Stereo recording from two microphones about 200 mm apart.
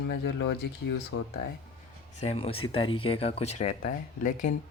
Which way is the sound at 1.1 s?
85° left.